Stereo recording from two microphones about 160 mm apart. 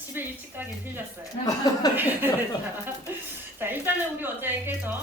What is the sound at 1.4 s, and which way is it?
Speech, 25° left (ahead or behind).